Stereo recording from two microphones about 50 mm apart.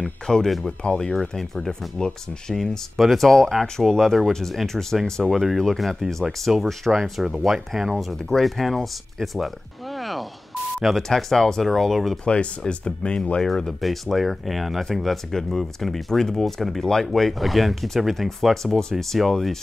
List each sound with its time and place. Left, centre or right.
0.0 s speech: centre
8.2 s speech: centre
12.3 s speech: left
13.4 s speech: centre